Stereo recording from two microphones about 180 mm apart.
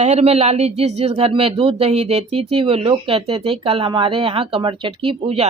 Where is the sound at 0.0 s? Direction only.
35° right (ahead or behind).